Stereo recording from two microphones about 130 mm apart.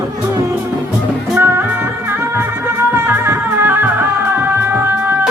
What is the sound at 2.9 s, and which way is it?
Music, 15° right (ahead or behind).